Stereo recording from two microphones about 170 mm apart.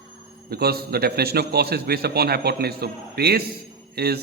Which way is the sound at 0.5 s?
65° right (ahead or behind).